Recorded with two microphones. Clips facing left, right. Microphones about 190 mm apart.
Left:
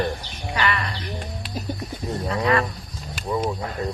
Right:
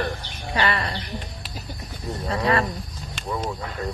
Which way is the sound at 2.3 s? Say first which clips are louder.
Left 1 dB; 30° right (ahead or behind).